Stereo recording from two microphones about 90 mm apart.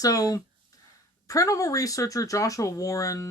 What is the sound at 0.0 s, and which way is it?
Speech, 40° left (ahead or behind).